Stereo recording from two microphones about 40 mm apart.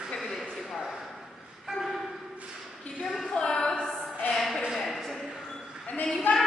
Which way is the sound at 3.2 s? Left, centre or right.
Left.